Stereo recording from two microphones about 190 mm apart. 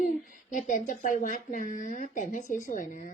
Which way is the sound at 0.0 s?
40° left (ahead or behind).